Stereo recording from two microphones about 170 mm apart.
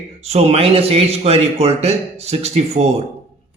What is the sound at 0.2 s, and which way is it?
Speech, 40° right (ahead or behind).